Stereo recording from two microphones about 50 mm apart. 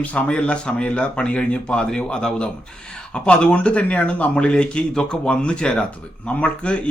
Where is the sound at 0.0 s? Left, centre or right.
Left.